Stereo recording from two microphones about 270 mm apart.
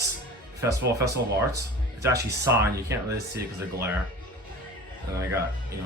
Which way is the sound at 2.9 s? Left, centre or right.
Centre.